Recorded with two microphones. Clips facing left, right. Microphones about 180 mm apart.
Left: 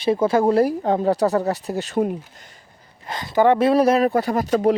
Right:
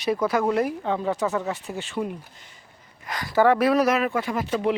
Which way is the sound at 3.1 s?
25° left (ahead or behind).